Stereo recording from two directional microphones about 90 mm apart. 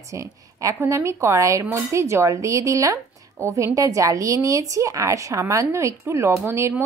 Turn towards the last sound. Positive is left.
turn(degrees=-30)  # may be behind; listen again after turning